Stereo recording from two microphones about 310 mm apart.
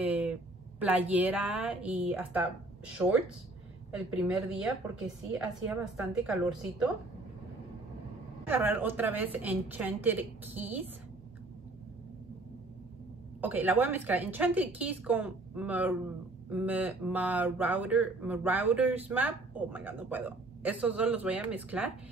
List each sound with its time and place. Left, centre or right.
0.0 s speech: centre
3.9 s speech: centre
8.5 s speech: centre
13.4 s speech: centre